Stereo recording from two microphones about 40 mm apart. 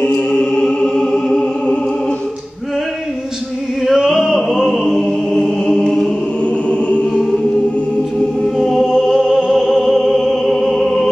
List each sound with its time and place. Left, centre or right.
0.1 s music: centre
3.9 s music: centre
4.3 s a sound: centre
5.0 s chant: centre
6.7 s choir: left
8.5 s music: centre